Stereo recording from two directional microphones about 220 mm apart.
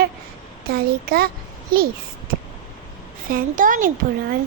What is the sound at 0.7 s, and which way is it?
A child's voice, 45° right (ahead or behind).